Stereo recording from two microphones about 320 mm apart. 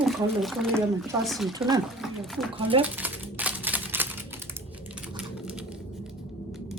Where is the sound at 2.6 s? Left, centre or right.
Centre.